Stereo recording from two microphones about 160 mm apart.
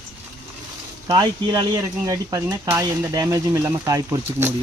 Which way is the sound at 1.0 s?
25° right (ahead or behind).